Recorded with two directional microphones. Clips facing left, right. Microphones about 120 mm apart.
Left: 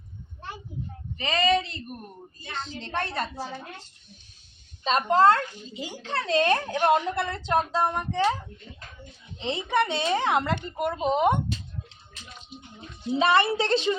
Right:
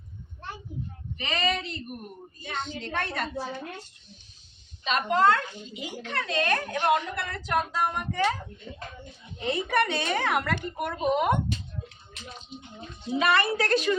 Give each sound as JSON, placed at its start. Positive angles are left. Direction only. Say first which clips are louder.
{"t": 1.2, "sound": "a child's voice", "louder": "left 4 dB", "side_deg": 30}
{"t": 2.6, "sound": "a child's voice", "louder": "left 3 dB", "side_deg": 35}
{"t": 4.8, "sound": "a child's voice", "louder": "left 3 dB", "side_deg": 35}
{"t": 9.4, "sound": "a woman's voice", "louder": "even", "side_deg": 20}
{"t": 13.1, "sound": "a woman's voice", "louder": "left 2 dB", "side_deg": 25}